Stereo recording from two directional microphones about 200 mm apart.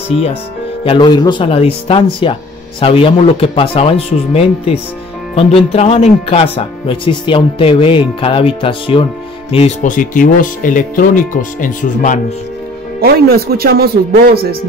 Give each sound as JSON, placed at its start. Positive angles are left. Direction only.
{"t": 0.8, "sound": "speech", "side_deg": 25}
{"t": 13.0, "sound": "speech", "side_deg": -50}